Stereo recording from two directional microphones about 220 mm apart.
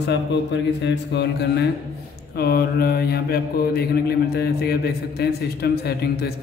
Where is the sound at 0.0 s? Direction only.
50° left (ahead or behind).